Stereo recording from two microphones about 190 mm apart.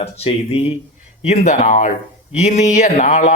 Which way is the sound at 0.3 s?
30° left (ahead or behind).